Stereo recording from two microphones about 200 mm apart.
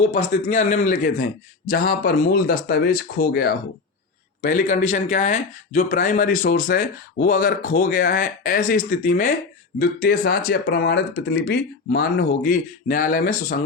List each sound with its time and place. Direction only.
0.1 s speech: 35° left (ahead or behind)